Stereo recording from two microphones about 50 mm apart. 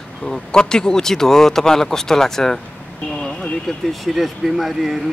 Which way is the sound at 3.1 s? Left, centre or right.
Centre.